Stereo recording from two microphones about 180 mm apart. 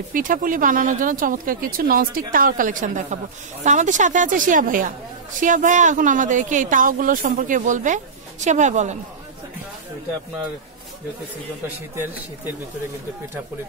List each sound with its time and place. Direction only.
0.1 s speech: 50° right (ahead or behind)
11.9 s speech: 10° right (ahead or behind)